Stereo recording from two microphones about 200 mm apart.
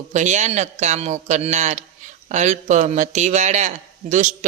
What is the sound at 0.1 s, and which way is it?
Speech, 35° right (ahead or behind).